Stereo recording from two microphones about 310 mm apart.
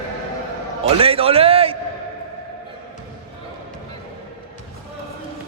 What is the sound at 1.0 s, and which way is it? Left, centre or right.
Speech, centre.